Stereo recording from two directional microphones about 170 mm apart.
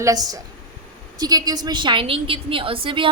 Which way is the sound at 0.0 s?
20° right (ahead or behind).